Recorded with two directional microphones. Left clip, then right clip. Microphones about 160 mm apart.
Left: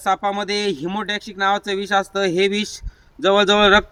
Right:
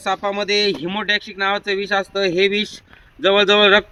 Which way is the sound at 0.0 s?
15° left (ahead or behind).